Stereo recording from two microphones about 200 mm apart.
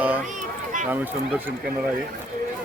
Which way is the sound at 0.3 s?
40° right (ahead or behind).